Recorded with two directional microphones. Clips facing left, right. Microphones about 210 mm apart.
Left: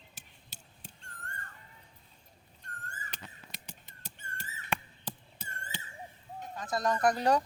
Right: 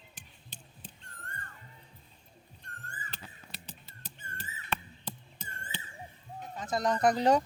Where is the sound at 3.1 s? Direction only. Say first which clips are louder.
Even; 15° left (ahead or behind).